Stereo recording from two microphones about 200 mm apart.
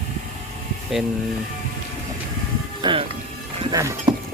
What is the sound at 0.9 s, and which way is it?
Speech, 5° right (ahead or behind).